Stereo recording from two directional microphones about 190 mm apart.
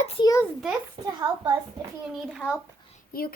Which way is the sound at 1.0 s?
30° right (ahead or behind).